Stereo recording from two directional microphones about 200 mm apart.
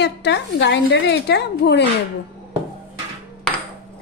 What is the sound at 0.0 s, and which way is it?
A woman's voice, 60° left (ahead or behind).